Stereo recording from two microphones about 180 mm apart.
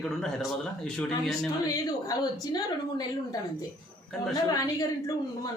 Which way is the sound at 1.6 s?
20° left (ahead or behind).